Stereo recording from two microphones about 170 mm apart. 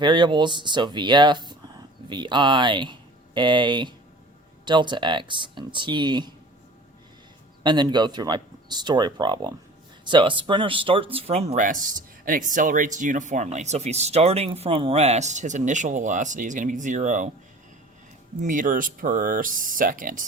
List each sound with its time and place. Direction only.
0.0 s speech: 25° right (ahead or behind)
7.6 s speech: 25° right (ahead or behind); by 17.3 s 45° right (ahead or behind)
18.4 s speech: 50° right (ahead or behind)